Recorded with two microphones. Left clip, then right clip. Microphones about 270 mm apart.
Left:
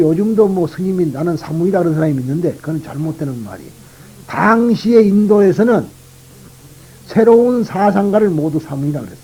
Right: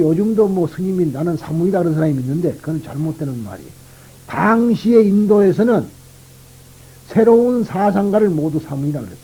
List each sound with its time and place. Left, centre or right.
0.0 s speech: right
7.1 s speech: right